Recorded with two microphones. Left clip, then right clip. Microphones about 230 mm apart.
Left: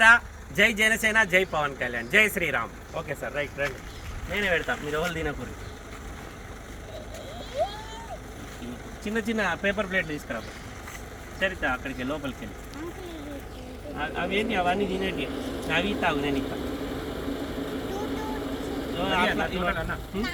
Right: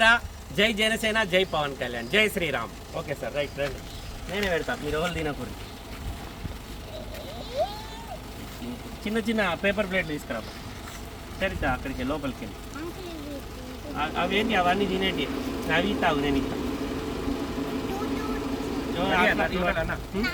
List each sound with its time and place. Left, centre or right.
0.0 s speech: centre
9.1 s speech: centre
13.9 s speech: centre
15.4 s vehicle: right
15.7 s speech: centre
16.4 s vehicle: right
18.9 s speech: centre